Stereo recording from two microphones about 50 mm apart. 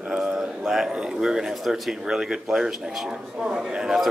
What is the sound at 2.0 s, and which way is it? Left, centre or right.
Speech, centre.